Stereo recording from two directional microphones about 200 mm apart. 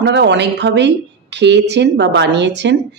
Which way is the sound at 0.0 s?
60° right (ahead or behind).